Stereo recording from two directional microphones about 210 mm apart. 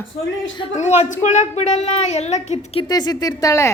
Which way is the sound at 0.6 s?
30° left (ahead or behind).